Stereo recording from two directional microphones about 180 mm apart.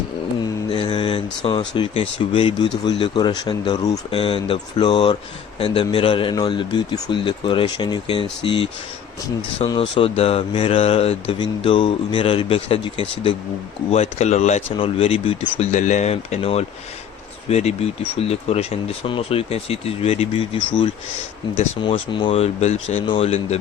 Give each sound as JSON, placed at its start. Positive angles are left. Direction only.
{"t": 0.7, "sound": "mantra", "side_deg": 30}
{"t": 1.5, "sound": "speech", "side_deg": 30}